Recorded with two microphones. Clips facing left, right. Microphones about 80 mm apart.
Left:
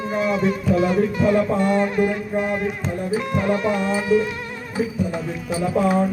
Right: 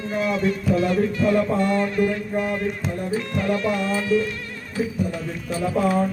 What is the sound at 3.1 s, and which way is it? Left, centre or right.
Speech, centre.